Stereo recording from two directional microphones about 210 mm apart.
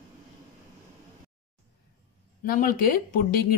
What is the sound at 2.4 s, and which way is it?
Speech, 45° left (ahead or behind).